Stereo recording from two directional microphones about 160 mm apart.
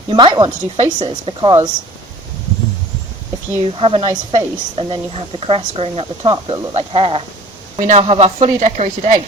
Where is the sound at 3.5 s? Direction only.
35° right (ahead or behind).